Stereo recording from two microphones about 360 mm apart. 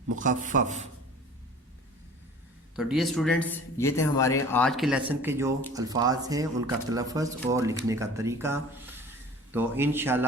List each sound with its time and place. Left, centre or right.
0.2 s a man's voice: right
2.7 s speech: centre